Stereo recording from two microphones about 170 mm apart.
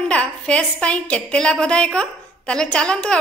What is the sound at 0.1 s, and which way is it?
A woman's voice, 5° left (ahead or behind).